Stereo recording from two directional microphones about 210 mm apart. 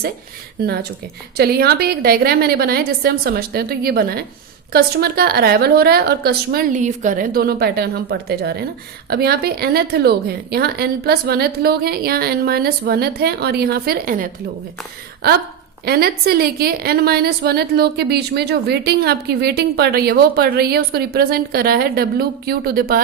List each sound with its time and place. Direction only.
0.6 s a woman's voice: 50° right (ahead or behind)